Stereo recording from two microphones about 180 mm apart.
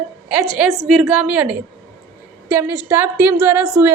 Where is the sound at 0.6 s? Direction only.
Centre (ahead or behind).